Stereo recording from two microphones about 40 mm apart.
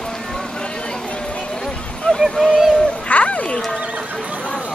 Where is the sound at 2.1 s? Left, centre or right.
Left.